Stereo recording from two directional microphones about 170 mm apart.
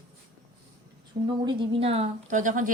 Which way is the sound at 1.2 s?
30° right (ahead or behind).